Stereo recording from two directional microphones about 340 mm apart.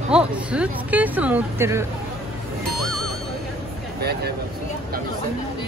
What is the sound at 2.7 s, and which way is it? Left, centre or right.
Music, centre.